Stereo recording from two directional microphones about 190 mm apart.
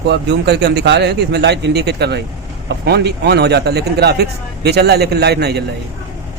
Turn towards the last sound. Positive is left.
turn(degrees=-60)  # may be behind; listen again after turning